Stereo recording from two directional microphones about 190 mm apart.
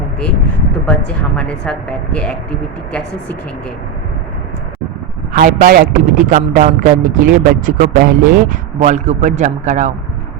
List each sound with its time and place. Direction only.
0.9 s speech: 5° left (ahead or behind)
5.3 s a man's voice: 45° right (ahead or behind)